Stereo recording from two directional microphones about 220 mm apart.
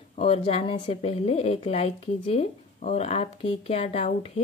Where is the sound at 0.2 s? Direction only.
25° left (ahead or behind).